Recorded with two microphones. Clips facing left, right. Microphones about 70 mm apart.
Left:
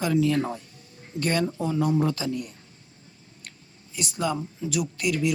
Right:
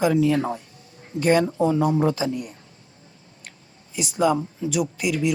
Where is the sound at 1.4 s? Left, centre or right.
Right.